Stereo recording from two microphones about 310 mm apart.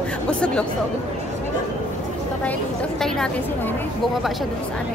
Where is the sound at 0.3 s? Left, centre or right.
Centre.